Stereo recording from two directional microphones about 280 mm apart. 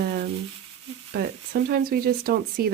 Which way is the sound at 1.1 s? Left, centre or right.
Right.